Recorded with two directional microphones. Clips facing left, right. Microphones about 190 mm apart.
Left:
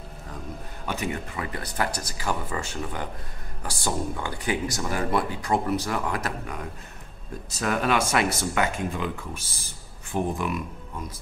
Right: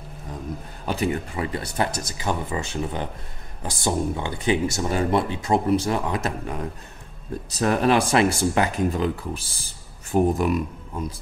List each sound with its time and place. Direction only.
0.8 s speech: 35° right (ahead or behind)